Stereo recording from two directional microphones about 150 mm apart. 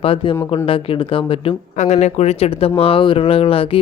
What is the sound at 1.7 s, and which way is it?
Speech, 55° left (ahead or behind).